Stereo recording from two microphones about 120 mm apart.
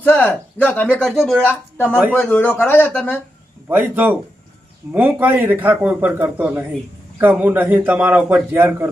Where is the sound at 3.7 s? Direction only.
15° right (ahead or behind).